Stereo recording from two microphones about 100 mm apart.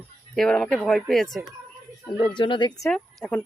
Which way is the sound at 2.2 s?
50° left (ahead or behind).